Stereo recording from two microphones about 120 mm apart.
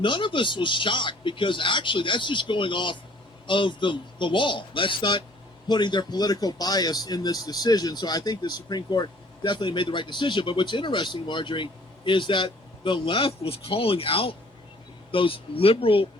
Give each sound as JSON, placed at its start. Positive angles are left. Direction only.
{"t": 0.0, "sound": "speech", "side_deg": 45}